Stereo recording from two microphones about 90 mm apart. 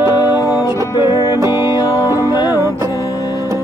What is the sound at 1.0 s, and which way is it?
Music, 45° left (ahead or behind).